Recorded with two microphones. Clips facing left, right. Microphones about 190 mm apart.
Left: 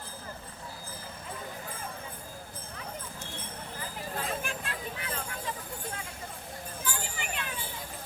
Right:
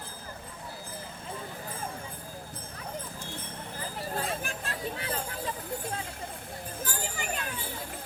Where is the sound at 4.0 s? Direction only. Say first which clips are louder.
Right 2 dB; 40° right (ahead or behind).